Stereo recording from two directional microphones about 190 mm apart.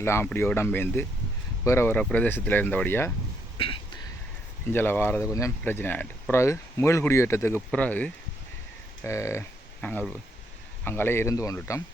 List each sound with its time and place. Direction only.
0.0 s speech: 15° left (ahead or behind)
3.6 s a sound: 30° left (ahead or behind)
4.7 s speech: 10° left (ahead or behind)